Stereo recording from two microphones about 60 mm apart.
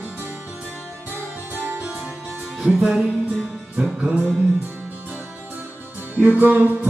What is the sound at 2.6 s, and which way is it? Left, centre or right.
Music, centre.